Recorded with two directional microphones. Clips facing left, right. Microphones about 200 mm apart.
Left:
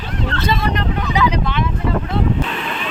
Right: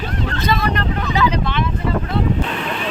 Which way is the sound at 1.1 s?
15° left (ahead or behind).